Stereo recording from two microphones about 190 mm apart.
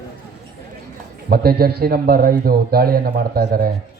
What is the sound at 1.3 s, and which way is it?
A man's voice, 55° right (ahead or behind).